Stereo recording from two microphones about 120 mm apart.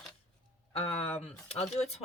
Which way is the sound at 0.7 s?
55° left (ahead or behind).